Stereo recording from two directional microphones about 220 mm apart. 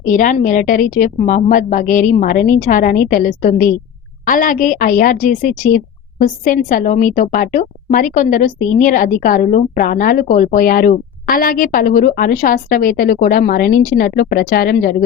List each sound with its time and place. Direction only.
0.1 s a woman's voice: 35° left (ahead or behind)